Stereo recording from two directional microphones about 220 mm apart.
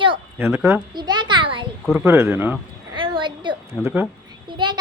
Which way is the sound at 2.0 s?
10° right (ahead or behind).